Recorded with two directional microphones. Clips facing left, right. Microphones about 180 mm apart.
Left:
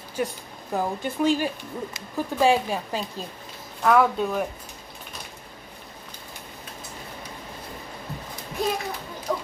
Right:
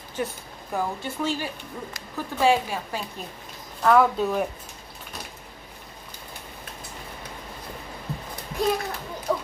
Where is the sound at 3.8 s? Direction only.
Centre (ahead or behind).